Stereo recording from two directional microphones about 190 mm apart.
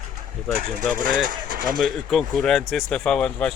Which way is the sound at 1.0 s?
45° right (ahead or behind).